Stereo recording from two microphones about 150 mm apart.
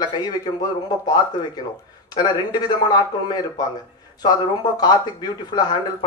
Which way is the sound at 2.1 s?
25° left (ahead or behind).